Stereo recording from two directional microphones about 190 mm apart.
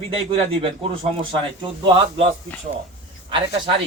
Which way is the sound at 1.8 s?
25° right (ahead or behind).